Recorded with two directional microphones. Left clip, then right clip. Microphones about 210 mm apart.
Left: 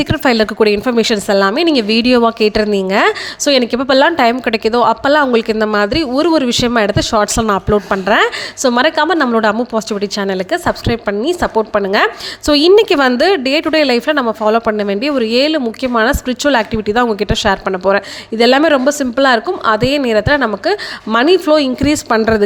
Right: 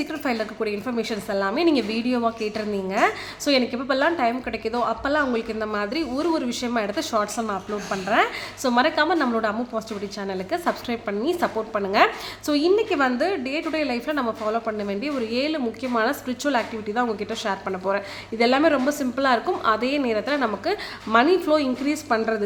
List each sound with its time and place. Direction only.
0.0 s speech: 40° left (ahead or behind)